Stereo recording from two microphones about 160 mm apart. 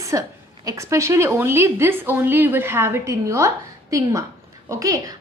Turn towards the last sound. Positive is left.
turn(degrees=-20)  # may be behind; listen again after turning